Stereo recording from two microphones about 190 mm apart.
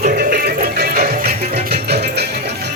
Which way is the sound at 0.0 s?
50° right (ahead or behind).